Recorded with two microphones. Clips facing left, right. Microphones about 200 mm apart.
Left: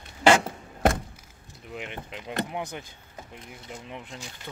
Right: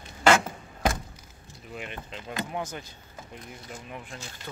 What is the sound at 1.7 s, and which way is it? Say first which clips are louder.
Speech: left 1 dB; 15° left (ahead or behind).